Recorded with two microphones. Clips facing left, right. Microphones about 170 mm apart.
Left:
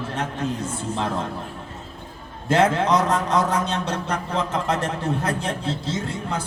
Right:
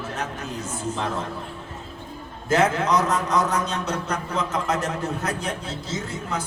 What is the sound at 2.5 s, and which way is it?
A man's voice, 30° left (ahead or behind).